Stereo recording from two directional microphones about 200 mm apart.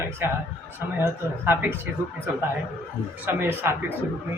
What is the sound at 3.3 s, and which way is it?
Speech, 10° right (ahead or behind).